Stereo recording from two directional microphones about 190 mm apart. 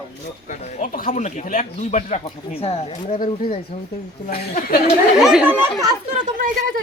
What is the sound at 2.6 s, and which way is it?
Speech, 30° left (ahead or behind).